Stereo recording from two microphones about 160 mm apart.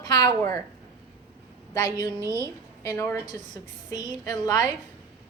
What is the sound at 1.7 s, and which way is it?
Speech, 25° left (ahead or behind).